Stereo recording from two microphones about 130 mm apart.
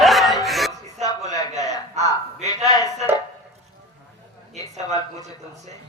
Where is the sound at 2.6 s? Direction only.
30° left (ahead or behind).